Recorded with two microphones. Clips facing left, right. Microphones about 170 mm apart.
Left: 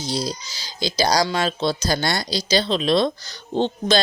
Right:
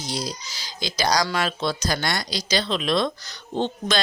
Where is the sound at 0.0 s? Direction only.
30° left (ahead or behind).